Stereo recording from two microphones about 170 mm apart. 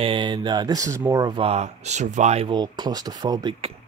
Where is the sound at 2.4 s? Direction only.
25° right (ahead or behind).